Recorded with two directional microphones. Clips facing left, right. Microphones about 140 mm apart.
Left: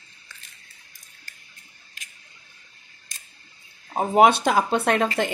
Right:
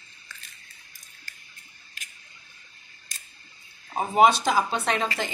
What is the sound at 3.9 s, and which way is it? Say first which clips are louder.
Speech: left 3 dB; 55° left (ahead or behind).